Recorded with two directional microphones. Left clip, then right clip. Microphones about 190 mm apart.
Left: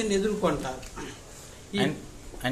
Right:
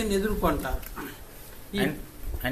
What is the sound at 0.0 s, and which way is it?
Speech, centre (ahead or behind).